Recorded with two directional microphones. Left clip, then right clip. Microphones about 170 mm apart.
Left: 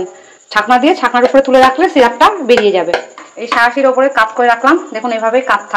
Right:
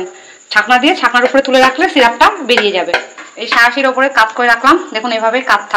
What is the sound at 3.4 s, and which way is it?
A woman's voice, 25° left (ahead or behind).